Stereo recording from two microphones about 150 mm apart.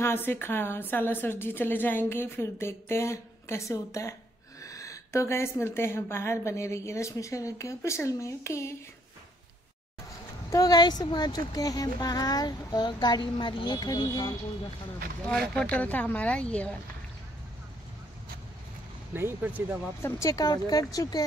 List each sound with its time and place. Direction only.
0.0 s a woman's voice: 15° left (ahead or behind)
10.5 s a woman's voice: 25° left (ahead or behind)
15.7 s a woman's voice: 10° left (ahead or behind)
19.1 s speech: 15° right (ahead or behind)
20.0 s a woman's voice: 20° left (ahead or behind)